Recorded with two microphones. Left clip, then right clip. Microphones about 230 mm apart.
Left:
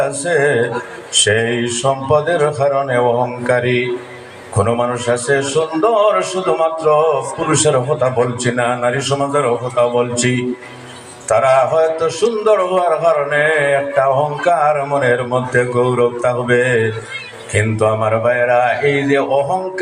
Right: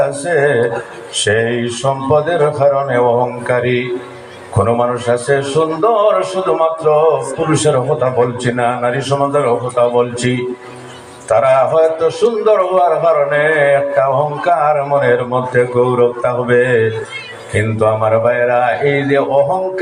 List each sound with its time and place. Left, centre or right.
0.3 s a man's voice: left